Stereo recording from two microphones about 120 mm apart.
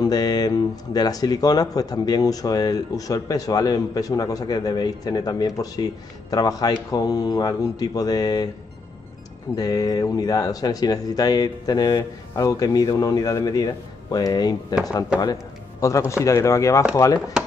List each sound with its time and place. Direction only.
0.0 s speech: 35° left (ahead or behind)
9.6 s speech: 30° left (ahead or behind)
15.8 s speech: 25° left (ahead or behind)